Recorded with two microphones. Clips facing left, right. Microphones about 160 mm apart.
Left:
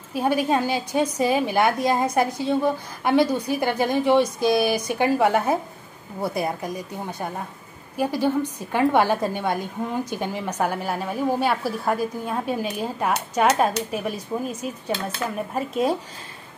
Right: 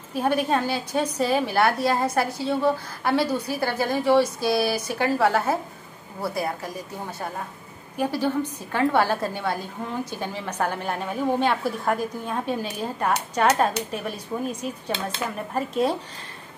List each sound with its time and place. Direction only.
0.2 s a woman's voice: 10° left (ahead or behind)
8.0 s a woman's voice: 15° left (ahead or behind)